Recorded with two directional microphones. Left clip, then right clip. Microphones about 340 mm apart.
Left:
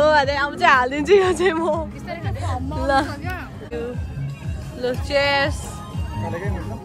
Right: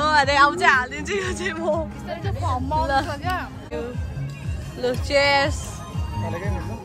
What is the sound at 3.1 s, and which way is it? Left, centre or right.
Hubbub, right.